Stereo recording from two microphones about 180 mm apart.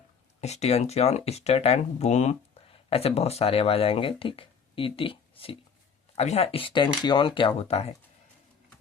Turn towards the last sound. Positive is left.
turn(degrees=35)  # may be behind; listen again after turning